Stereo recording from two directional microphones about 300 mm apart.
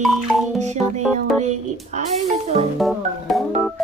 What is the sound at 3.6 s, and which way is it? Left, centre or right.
Organ, centre.